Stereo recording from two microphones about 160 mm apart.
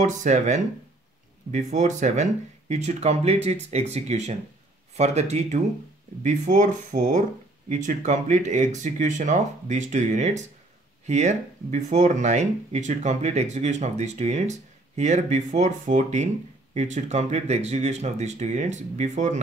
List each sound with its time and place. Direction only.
0.0 s speech: 50° right (ahead or behind)